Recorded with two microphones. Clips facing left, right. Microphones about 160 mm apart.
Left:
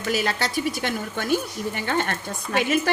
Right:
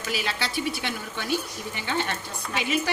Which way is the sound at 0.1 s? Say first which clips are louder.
Left 5 dB; 45° left (ahead or behind).